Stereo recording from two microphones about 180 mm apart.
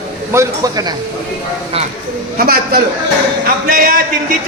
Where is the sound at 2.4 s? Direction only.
55° right (ahead or behind).